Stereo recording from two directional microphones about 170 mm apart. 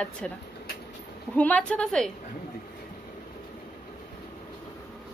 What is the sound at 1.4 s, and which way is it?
Speech, 10° left (ahead or behind).